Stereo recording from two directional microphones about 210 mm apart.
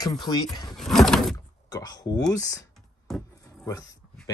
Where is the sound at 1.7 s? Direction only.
20° left (ahead or behind).